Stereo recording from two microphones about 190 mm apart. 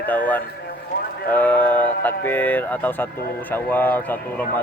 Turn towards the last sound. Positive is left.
turn(degrees=10)  # may be behind; listen again after turning